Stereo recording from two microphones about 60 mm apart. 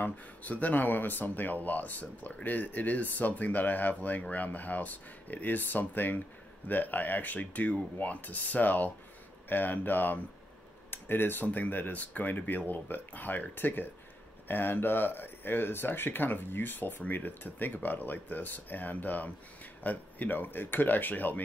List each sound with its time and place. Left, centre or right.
0.0 s speech: left